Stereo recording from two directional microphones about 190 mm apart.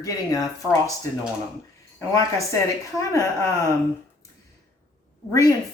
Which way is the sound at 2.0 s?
15° left (ahead or behind).